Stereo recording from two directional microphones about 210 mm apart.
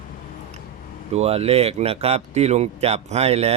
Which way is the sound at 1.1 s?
30° right (ahead or behind).